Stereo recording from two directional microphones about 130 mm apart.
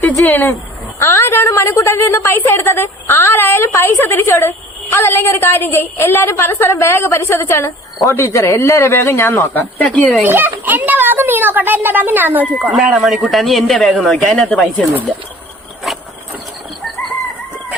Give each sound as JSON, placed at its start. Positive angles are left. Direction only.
{"t": 0.0, "sound": "a sound", "side_deg": 15}
{"t": 0.9, "sound": "a woman's voice", "side_deg": 20}
{"t": 10.2, "sound": "a man's voice", "side_deg": -15}
{"t": 15.9, "sound": "vehicle", "side_deg": 0}